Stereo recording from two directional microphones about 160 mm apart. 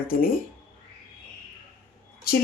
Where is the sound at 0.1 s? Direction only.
65° left (ahead or behind).